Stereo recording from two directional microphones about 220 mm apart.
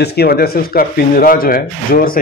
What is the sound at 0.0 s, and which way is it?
Speech, 45° left (ahead or behind).